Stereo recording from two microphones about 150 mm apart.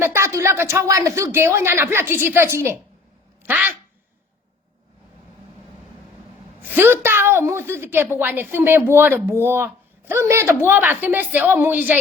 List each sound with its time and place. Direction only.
0.0 s a woman's voice: 20° right (ahead or behind)
6.6 s a woman's voice: 15° right (ahead or behind)